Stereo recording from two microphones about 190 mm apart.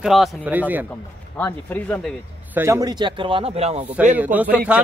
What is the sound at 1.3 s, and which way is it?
Speech, 10° left (ahead or behind).